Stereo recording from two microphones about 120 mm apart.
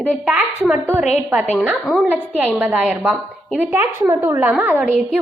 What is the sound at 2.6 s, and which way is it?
A woman's voice, 15° right (ahead or behind).